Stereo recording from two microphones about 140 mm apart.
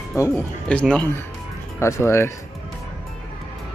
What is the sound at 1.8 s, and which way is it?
Speech, 20° left (ahead or behind).